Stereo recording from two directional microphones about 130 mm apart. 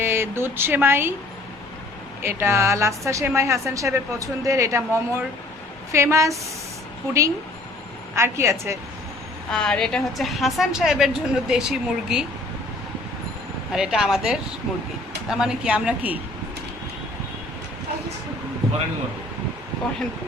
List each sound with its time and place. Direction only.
0.0 s speech: 20° right (ahead or behind)
2.2 s a woman's voice: 20° right (ahead or behind)
8.1 s a woman's voice: 20° right (ahead or behind)
9.5 s a woman's voice: 5° left (ahead or behind)
13.7 s a woman's voice: 5° right (ahead or behind)